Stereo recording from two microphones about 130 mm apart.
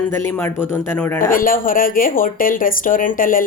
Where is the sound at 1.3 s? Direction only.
90° left.